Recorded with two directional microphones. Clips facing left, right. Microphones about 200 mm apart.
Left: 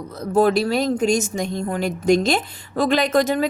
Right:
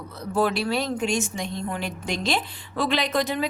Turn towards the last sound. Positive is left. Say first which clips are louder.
# left 6 dB
turn(degrees=45)  # may be behind; listen again after turning